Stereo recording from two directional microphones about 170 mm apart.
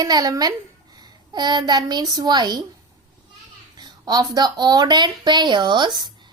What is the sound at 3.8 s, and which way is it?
A woman's voice, 25° right (ahead or behind).